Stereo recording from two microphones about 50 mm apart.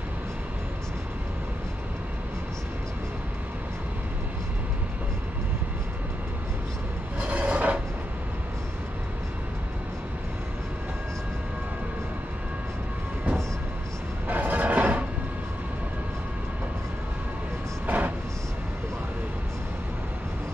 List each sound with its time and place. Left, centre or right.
7.2 s rub: right
14.2 s music: right
17.8 s vehicle: right